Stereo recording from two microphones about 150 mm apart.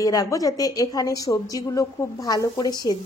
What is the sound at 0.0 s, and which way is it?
Speech, 20° left (ahead or behind).